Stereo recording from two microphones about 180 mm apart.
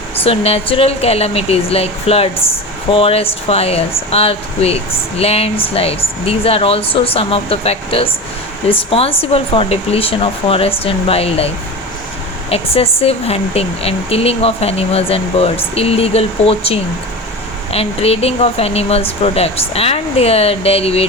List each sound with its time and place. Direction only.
0.2 s speech: 35° left (ahead or behind)